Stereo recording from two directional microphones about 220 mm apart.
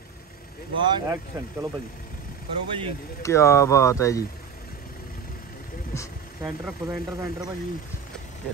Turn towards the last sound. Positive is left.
turn(degrees=-5)  # may be behind; listen again after turning